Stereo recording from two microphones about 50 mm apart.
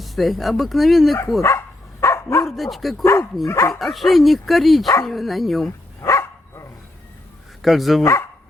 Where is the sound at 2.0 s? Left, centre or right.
Left.